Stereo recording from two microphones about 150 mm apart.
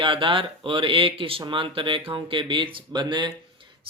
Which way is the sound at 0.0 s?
35° right (ahead or behind).